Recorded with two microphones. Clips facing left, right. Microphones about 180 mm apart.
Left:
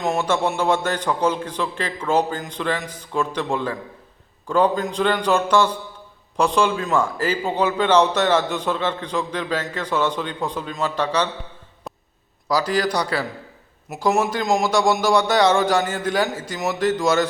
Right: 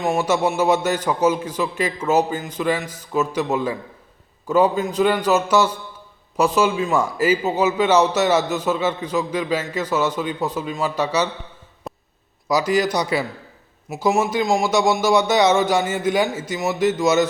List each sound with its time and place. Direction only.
0.0 s a man's voice: 5° right (ahead or behind)
12.5 s a man's voice: 10° right (ahead or behind)